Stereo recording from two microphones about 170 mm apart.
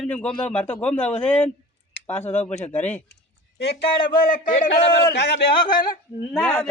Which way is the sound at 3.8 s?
30° left (ahead or behind).